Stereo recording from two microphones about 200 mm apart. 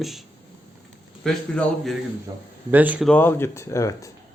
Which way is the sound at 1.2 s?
5° left (ahead or behind).